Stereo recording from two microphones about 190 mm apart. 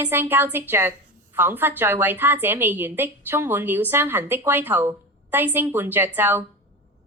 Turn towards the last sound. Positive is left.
turn(degrees=-10)  # may be behind; listen again after turning